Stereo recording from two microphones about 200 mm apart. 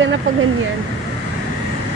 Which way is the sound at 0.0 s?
70° right (ahead or behind).